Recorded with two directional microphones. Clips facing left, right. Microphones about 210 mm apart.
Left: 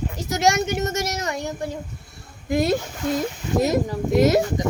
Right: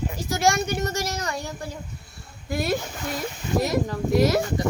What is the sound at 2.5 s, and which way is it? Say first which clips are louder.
Speech: left 5 dB; 20° left (ahead or behind).